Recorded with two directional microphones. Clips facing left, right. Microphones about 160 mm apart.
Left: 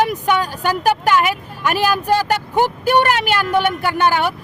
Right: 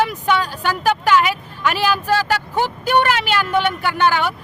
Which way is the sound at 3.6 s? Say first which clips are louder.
Left 1 dB; 45° left (ahead or behind).